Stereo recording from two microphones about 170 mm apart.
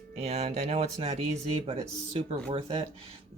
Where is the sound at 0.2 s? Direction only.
40° right (ahead or behind).